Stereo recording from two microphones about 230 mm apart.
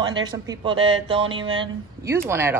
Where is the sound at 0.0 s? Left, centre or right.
Centre.